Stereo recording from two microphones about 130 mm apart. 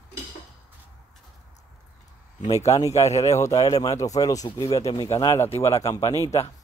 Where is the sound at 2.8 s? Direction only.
25° left (ahead or behind).